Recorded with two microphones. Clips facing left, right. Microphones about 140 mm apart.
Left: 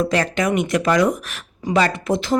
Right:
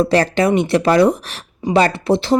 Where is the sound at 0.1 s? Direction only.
35° right (ahead or behind).